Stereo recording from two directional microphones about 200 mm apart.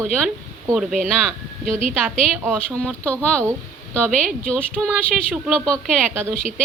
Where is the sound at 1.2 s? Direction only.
Centre (ahead or behind).